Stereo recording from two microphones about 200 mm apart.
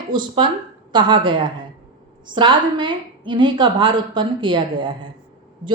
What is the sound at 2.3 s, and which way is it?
A woman's voice, 25° right (ahead or behind).